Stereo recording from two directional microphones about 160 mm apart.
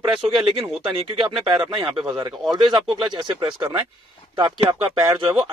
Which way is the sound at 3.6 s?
15° right (ahead or behind).